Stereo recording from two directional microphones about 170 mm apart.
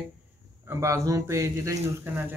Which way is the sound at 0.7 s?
15° right (ahead or behind).